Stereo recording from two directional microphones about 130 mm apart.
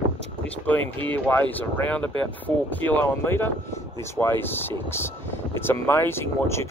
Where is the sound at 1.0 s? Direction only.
10° left (ahead or behind).